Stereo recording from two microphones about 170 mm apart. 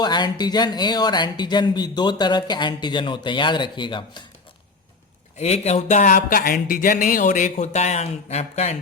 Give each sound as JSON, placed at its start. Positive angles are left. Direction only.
{"t": 0.0, "sound": "speech", "side_deg": 25}
{"t": 5.4, "sound": "speech", "side_deg": 40}